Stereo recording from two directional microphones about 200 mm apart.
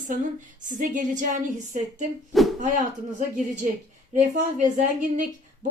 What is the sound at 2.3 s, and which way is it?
Speech, centre (ahead or behind).